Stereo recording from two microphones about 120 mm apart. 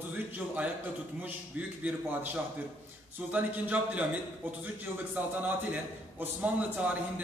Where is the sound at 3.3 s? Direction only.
10° right (ahead or behind).